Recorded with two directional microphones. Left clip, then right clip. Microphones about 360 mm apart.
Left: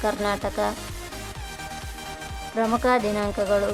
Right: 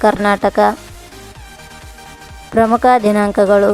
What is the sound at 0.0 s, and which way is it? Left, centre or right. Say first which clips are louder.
Speech: right 12 dB; centre.